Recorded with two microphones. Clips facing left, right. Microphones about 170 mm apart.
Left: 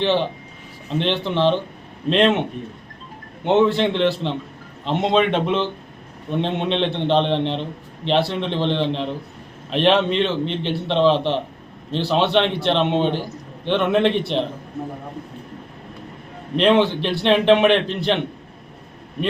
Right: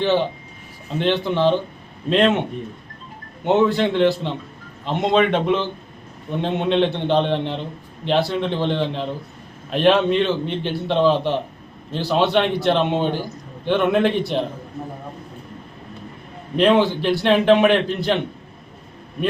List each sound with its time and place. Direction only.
0.0 s a man's voice: centre (ahead or behind)
3.4 s a man's voice: 5° right (ahead or behind)
16.6 s a man's voice: 5° right (ahead or behind)